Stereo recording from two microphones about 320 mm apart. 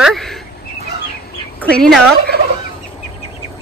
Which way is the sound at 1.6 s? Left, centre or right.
Centre.